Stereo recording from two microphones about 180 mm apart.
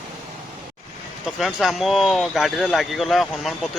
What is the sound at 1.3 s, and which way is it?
Speech, centre (ahead or behind).